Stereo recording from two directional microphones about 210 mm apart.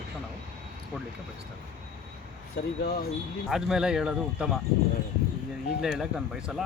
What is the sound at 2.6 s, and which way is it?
Speech, 50° left (ahead or behind).